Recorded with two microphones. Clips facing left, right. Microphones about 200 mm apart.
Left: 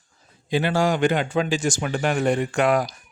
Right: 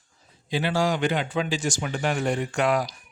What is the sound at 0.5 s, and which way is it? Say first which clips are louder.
Speech: left 3 dB; 50° left (ahead or behind).